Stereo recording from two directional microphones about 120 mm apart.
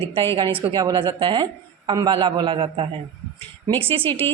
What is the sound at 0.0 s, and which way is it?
Speech, 45° right (ahead or behind).